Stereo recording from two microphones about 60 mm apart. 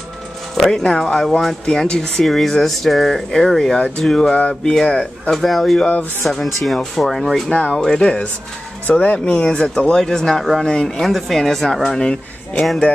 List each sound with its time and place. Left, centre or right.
0.6 s a woman's voice: centre